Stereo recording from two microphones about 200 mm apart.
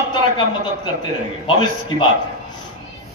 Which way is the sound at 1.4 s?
25° left (ahead or behind).